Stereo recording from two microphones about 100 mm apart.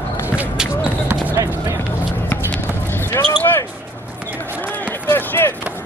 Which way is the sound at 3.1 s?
20° left (ahead or behind).